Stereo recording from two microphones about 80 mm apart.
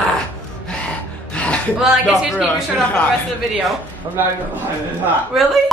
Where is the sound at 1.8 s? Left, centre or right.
Centre.